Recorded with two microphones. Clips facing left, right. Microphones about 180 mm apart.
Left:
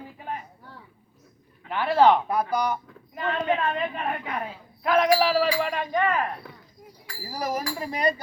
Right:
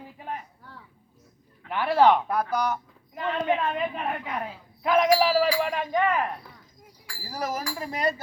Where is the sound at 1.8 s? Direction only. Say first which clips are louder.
Left 1 dB; 15° left (ahead or behind).